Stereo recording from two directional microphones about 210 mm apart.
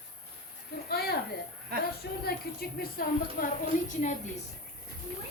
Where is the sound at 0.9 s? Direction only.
50° left (ahead or behind).